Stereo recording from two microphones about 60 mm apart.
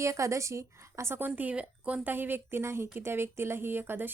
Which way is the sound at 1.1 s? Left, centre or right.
Right.